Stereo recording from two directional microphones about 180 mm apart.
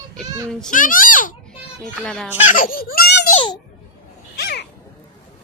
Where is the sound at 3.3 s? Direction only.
30° left (ahead or behind).